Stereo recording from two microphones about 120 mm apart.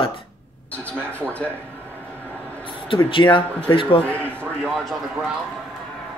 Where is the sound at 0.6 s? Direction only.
10° left (ahead or behind).